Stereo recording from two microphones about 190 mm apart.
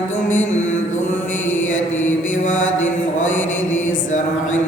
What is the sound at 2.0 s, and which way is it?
Mantra, 40° left (ahead or behind).